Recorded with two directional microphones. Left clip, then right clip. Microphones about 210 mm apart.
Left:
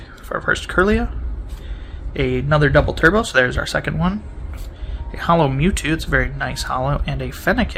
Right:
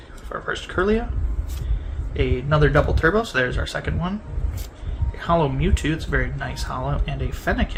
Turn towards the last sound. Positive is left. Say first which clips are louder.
# left 5 dB
turn(degrees=55)  # may be behind; listen again after turning